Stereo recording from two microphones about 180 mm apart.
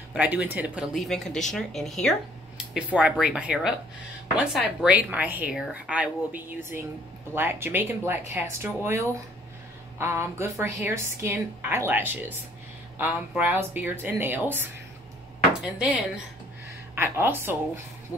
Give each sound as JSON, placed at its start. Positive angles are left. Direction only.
{"t": 0.1, "sound": "a woman's voice", "side_deg": -10}